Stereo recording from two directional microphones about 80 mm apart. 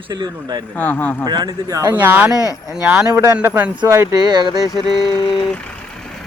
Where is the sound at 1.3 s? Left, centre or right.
Right.